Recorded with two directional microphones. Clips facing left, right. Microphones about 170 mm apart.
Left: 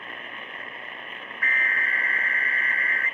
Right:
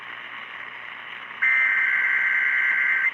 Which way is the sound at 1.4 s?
30° left (ahead or behind).